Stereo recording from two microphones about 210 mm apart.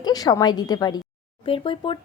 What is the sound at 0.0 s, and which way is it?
A woman's voice, 20° left (ahead or behind).